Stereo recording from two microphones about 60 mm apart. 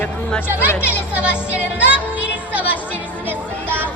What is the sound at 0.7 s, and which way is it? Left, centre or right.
Speech, left.